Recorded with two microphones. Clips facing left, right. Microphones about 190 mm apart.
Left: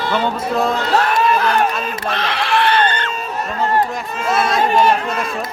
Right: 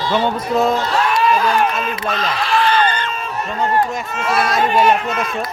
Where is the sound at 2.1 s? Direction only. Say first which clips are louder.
Left 1 dB; 70° left (ahead or behind).